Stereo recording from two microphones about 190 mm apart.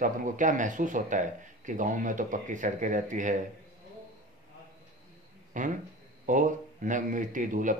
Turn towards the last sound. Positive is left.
turn(degrees=-45)  # may be behind; listen again after turning